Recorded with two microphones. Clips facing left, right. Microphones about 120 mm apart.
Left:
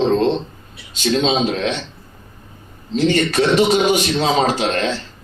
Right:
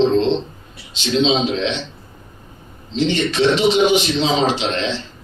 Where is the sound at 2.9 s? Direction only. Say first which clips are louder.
Left 2 dB; 45° left (ahead or behind).